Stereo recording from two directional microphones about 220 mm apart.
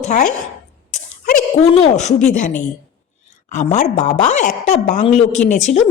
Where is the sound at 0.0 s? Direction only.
30° left (ahead or behind).